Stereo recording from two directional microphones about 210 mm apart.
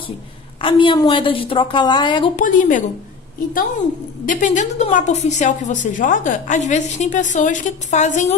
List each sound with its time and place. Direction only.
0.6 s a woman's voice: 25° left (ahead or behind)
2.3 s a woman's voice: 40° left (ahead or behind)
4.3 s a woman's voice: 35° left (ahead or behind)